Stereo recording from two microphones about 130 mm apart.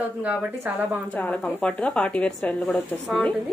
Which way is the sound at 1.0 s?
10° left (ahead or behind).